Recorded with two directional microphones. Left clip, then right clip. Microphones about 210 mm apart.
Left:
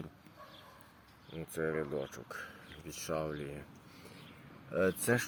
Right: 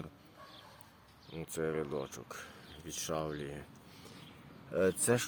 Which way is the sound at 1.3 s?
Centre (ahead or behind).